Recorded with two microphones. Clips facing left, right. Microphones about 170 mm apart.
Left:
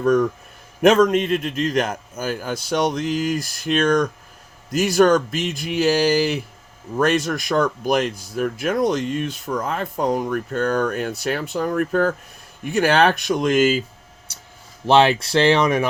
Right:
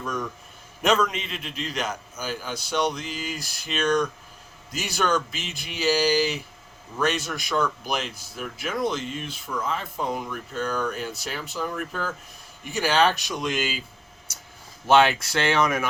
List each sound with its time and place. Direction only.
0.8 s a man's voice: 50° left (ahead or behind)
14.8 s speech: 35° left (ahead or behind)